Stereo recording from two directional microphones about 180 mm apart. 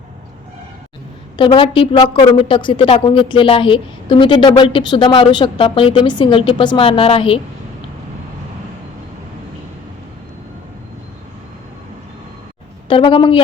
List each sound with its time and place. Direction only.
1.4 s a woman's voice: 30° left (ahead or behind)
12.9 s a woman's voice: 30° left (ahead or behind)